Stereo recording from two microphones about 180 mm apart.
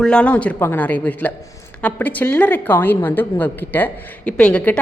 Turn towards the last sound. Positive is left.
turn(degrees=5)  # may be behind; listen again after turning